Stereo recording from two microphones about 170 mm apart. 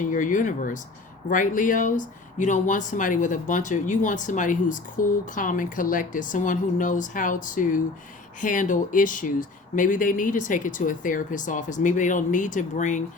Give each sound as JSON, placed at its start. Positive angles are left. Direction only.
{"t": 0.1, "sound": "speech", "side_deg": 50}